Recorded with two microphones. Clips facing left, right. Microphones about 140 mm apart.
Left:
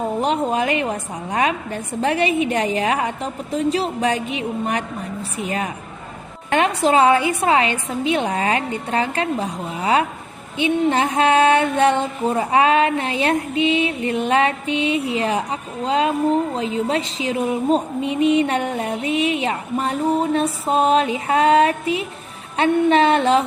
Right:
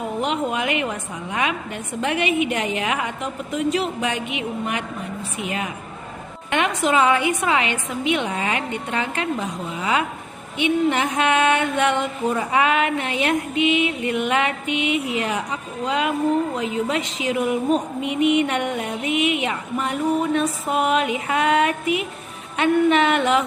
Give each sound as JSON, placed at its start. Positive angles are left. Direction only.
{"t": 0.0, "sound": "music", "side_deg": 35}